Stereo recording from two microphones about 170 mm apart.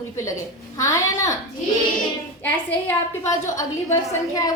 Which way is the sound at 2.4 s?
10° left (ahead or behind).